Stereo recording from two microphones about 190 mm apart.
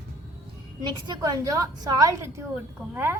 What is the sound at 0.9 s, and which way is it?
A woman's voice, 20° right (ahead or behind).